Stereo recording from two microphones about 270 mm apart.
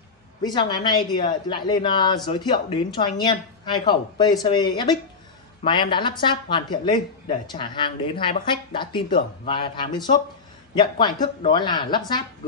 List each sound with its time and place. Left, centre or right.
0.4 s speech: centre